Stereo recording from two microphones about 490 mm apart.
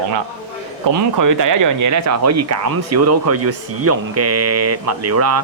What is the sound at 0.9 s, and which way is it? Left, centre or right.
Speech, right.